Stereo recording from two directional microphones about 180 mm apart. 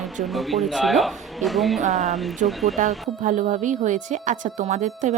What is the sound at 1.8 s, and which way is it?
Speech, 40° right (ahead or behind).